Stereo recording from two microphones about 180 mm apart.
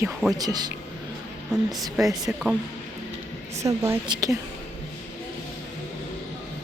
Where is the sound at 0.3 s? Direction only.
20° right (ahead or behind).